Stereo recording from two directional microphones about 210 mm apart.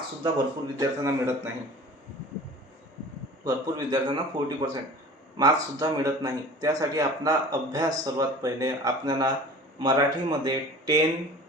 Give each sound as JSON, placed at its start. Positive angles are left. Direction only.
{"t": 0.2, "sound": "a man's voice", "side_deg": -20}
{"t": 3.4, "sound": "a man's voice", "side_deg": -20}